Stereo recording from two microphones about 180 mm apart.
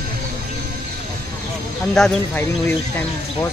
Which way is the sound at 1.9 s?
5° left (ahead or behind).